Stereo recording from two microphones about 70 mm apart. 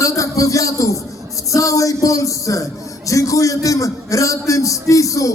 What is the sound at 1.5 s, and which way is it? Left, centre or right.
A man's voice, left.